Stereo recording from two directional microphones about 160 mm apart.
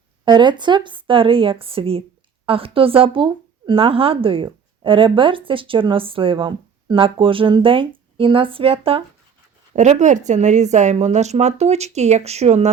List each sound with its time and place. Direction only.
0.3 s speech: 30° right (ahead or behind)
9.7 s speech: 45° right (ahead or behind)